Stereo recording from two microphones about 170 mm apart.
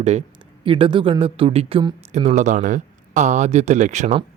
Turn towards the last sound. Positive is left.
turn(degrees=-45)  # may be behind; listen again after turning